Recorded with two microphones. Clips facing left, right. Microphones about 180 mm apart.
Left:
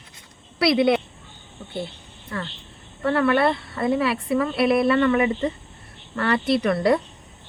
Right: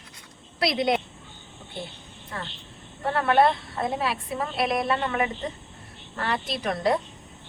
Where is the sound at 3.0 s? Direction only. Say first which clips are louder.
Left 2 dB; 70° left (ahead or behind).